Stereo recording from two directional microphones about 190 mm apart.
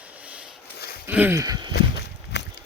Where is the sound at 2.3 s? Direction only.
65° left (ahead or behind).